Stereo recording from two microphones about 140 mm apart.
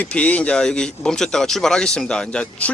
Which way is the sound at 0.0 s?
10° left (ahead or behind).